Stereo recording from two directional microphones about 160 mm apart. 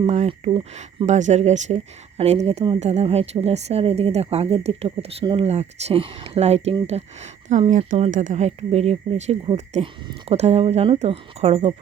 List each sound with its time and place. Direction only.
0.0 s speech: 40° right (ahead or behind)
1.0 s speech: 45° right (ahead or behind)